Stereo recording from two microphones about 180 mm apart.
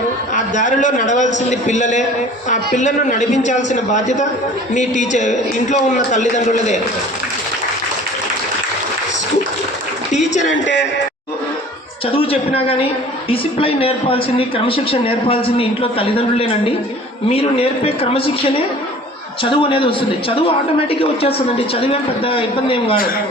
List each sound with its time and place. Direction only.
0.3 s a man's voice: 45° left (ahead or behind)
10.5 s a man's voice: 80° left
12.1 s speech: 30° left (ahead or behind)
19.4 s a man's voice: 30° left (ahead or behind)